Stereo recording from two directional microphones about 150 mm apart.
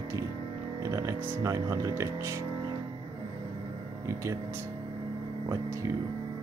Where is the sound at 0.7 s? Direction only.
20° right (ahead or behind).